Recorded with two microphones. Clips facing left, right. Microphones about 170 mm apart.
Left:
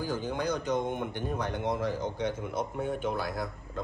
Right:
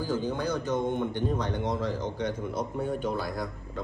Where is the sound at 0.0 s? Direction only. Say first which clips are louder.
Right 2 dB; 10° left (ahead or behind).